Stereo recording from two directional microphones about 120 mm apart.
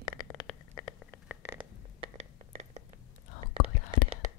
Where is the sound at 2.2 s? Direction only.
65° right (ahead or behind).